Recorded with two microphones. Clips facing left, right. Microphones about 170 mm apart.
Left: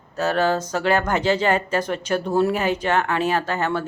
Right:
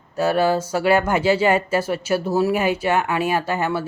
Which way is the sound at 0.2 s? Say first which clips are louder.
Right 2 dB; 10° right (ahead or behind).